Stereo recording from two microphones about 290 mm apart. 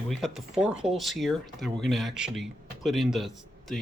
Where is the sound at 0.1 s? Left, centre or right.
Centre.